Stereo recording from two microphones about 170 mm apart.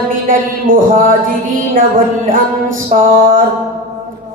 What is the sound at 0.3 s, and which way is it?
Music, 55° right (ahead or behind).